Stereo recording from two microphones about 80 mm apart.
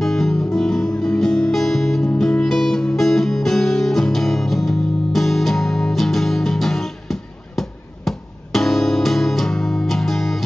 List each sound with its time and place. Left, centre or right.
0.0 s music: centre